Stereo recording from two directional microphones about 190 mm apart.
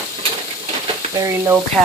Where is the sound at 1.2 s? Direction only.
15° right (ahead or behind).